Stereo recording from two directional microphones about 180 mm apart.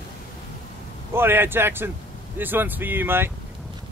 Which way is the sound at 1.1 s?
10° right (ahead or behind).